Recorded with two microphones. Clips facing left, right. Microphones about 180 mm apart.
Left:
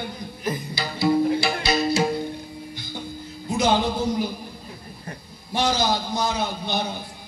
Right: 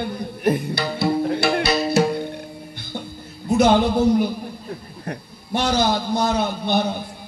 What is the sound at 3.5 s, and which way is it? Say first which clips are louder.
A man's voice: right 5 dB; 60° right (ahead or behind).